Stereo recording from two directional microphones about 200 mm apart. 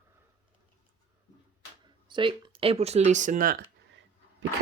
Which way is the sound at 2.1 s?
25° right (ahead or behind).